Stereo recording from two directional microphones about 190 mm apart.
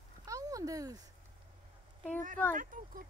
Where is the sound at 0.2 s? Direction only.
20° right (ahead or behind).